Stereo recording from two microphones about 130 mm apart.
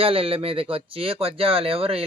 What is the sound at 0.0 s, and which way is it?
Speech, 45° right (ahead or behind).